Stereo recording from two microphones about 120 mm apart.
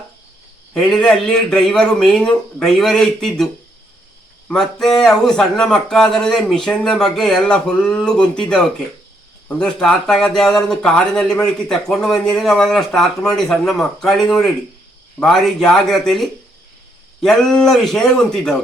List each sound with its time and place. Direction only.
0.7 s speech: 5° left (ahead or behind)